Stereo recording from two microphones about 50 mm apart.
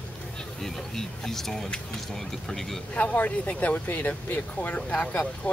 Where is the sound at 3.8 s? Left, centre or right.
Left.